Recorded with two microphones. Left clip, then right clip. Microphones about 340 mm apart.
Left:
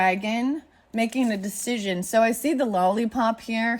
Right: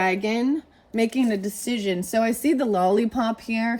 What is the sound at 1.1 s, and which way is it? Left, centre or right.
Speech, centre.